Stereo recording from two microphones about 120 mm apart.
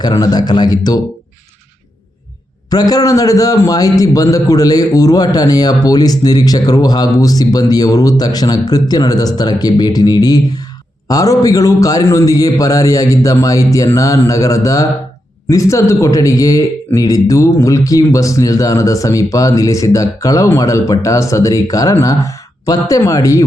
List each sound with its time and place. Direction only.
0.2 s a man's voice: 35° left (ahead or behind)
2.6 s a man's voice: 30° left (ahead or behind)